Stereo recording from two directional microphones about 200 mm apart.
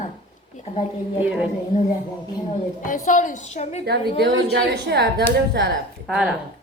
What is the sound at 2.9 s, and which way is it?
Speech, 40° left (ahead or behind).